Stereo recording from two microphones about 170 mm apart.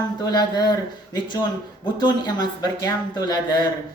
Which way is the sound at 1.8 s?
25° left (ahead or behind).